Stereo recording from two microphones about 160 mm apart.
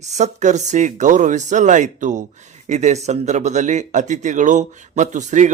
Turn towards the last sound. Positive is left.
turn(degrees=-50)  # may be behind; listen again after turning